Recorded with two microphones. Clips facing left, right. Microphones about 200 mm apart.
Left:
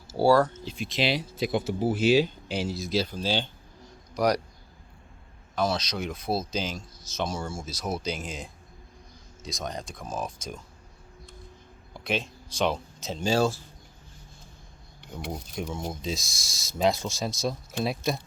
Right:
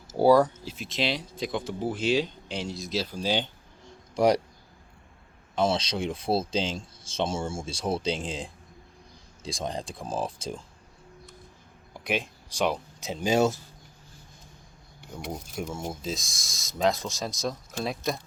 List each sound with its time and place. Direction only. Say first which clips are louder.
0.1 s speech: right 1 dB; 20° right (ahead or behind)
0.6 s speech: left 2 dB; 5° right (ahead or behind)
3.2 s speech: right 1 dB; 15° right (ahead or behind)
4.1 s speech: right 3 dB; 25° right (ahead or behind)
5.5 s speech: right 2 dB; 30° right (ahead or behind)
11.9 s speech: even; 15° right (ahead or behind)
15.3 s speech: even; 5° right (ahead or behind)